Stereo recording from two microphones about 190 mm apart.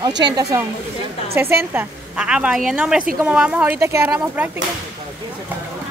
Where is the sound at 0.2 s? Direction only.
15° right (ahead or behind).